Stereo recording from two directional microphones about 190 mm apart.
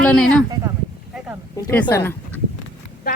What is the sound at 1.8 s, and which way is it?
Speech, 15° left (ahead or behind).